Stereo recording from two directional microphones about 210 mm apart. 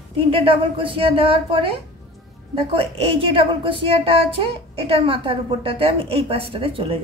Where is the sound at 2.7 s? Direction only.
25° right (ahead or behind).